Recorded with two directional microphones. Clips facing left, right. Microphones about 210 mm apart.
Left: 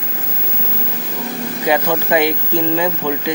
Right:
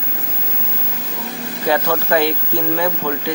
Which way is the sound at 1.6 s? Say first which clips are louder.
Left 1 dB; 15° left (ahead or behind).